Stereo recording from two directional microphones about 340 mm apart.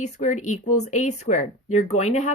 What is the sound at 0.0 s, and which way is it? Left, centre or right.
A woman's voice, left.